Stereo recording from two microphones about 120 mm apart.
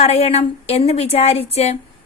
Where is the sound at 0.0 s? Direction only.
60° left (ahead or behind).